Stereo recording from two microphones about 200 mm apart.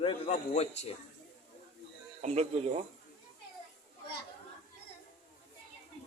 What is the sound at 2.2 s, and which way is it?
Speech, 35° right (ahead or behind).